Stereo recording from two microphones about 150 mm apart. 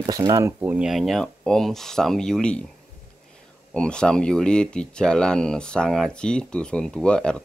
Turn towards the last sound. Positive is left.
turn(degrees=5)  # may be behind; listen again after turning